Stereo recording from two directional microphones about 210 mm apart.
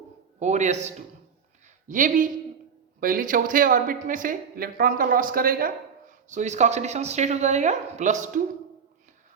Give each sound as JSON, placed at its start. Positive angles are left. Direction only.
{"t": 0.3, "sound": "speech", "side_deg": -35}